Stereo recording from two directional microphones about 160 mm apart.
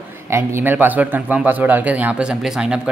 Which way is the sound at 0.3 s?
15° right (ahead or behind).